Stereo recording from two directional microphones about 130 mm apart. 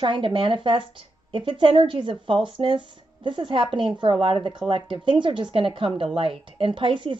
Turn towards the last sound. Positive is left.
turn(degrees=-40)  # may be behind; listen again after turning